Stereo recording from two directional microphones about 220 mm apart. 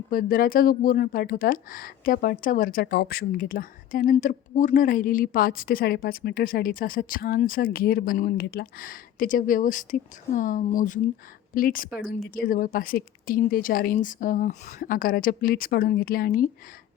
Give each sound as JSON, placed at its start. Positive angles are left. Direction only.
{"t": 0.1, "sound": "speech", "side_deg": 40}